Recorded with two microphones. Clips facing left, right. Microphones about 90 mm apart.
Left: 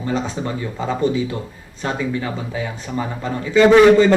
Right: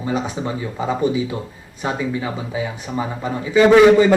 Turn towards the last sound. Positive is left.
turn(degrees=-10)  # may be behind; listen again after turning